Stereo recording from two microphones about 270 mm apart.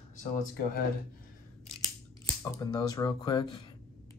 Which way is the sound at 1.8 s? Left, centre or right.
Centre.